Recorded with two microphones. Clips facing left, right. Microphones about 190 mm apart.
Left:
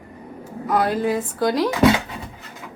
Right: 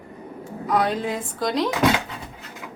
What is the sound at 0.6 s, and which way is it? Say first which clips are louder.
Speech: left 3 dB; centre (ahead or behind).